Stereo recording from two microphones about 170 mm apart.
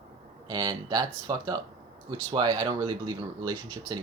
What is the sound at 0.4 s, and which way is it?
Speech, 25° right (ahead or behind).